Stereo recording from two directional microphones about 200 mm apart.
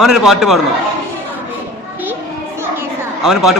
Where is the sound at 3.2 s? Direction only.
Centre (ahead or behind).